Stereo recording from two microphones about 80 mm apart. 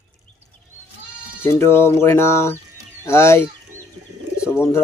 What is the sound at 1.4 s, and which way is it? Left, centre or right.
Speech, left.